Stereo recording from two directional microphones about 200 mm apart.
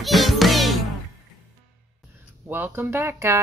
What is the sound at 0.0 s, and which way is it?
Music, centre (ahead or behind).